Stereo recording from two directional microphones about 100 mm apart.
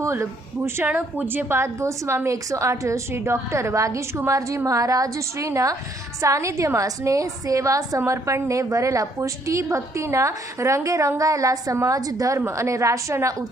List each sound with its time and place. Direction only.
0.0 s a woman's voice: 25° right (ahead or behind)